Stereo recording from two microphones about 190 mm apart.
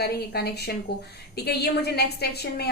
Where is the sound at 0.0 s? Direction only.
55° left (ahead or behind).